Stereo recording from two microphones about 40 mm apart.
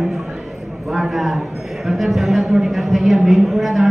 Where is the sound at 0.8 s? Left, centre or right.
Centre.